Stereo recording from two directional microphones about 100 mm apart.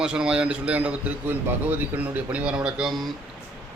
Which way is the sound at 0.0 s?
10° right (ahead or behind).